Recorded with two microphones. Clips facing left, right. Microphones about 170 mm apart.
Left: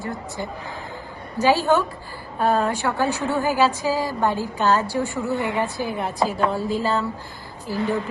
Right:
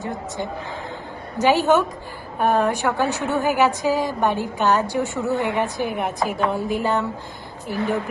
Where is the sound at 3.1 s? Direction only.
15° left (ahead or behind).